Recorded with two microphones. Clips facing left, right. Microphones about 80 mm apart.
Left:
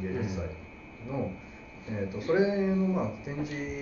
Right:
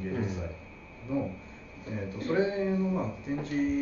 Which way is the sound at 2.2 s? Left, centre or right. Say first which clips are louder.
Left 2 dB; centre.